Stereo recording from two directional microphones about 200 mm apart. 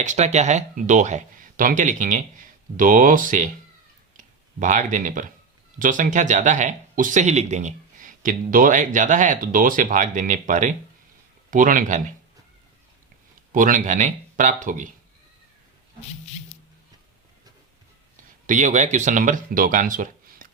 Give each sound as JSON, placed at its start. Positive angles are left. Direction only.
{"t": 0.0, "sound": "speech", "side_deg": -35}
{"t": 13.5, "sound": "speech", "side_deg": -40}
{"t": 18.4, "sound": "speech", "side_deg": -40}